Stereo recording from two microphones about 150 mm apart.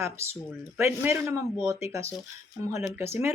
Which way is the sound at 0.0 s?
15° right (ahead or behind).